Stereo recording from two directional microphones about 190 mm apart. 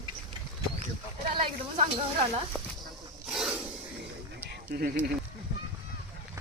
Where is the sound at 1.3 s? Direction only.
30° right (ahead or behind).